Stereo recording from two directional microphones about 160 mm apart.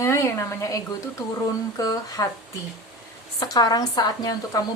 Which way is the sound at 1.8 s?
20° left (ahead or behind).